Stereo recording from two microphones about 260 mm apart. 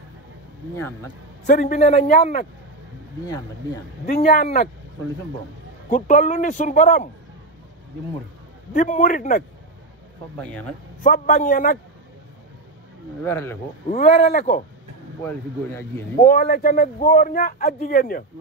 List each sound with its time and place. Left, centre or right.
1.4 s speech: left
4.0 s speech: left
5.9 s a man's voice: left
8.7 s a man's voice: left
10.3 s speech: centre
11.0 s a man's voice: left
13.2 s speech: centre
13.8 s a man's voice: left
16.2 s speech: left